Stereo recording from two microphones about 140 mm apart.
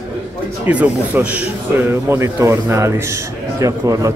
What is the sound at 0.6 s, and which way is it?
A man's voice, 10° right (ahead or behind).